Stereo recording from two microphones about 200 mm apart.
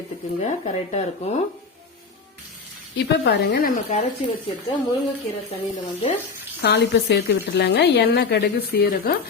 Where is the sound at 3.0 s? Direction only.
60° left (ahead or behind).